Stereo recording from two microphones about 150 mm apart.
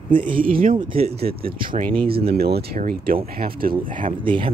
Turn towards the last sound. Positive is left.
turn(degrees=-35)  # may be behind; listen again after turning